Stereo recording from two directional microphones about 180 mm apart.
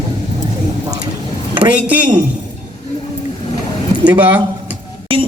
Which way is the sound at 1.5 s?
25° right (ahead or behind).